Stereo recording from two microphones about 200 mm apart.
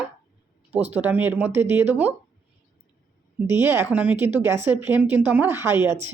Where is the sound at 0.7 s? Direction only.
30° right (ahead or behind).